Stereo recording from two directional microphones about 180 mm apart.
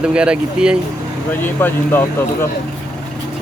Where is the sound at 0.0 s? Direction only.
5° right (ahead or behind).